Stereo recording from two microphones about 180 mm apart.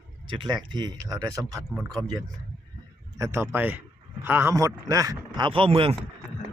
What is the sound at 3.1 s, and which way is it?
Speech, 15° right (ahead or behind).